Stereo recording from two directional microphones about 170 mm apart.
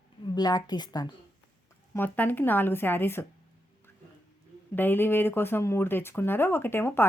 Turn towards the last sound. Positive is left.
turn(degrees=15)  # may be behind; listen again after turning